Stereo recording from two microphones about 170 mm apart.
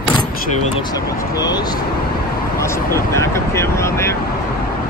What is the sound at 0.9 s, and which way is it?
Speech, 20° left (ahead or behind).